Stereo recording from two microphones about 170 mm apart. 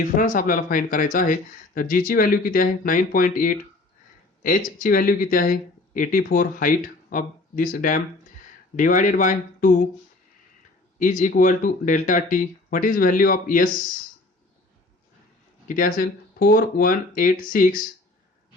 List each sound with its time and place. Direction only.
0.0 s speech: 55° left (ahead or behind)
11.0 s speech: 50° left (ahead or behind)
15.6 s speech: 55° left (ahead or behind)